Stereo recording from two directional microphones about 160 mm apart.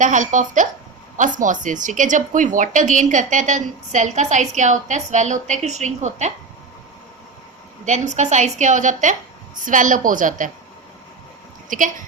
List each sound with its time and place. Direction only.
0.0 s speech: 50° right (ahead or behind)
7.9 s a woman's voice: 45° right (ahead or behind)
11.7 s a woman's voice: 55° right (ahead or behind)